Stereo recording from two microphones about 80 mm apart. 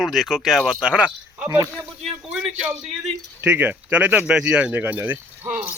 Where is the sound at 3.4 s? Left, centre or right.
Right.